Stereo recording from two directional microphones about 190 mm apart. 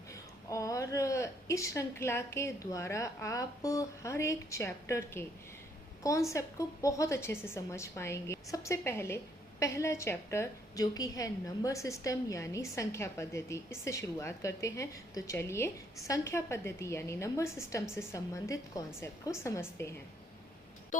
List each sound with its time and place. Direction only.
0.1 s a woman's voice: 15° left (ahead or behind)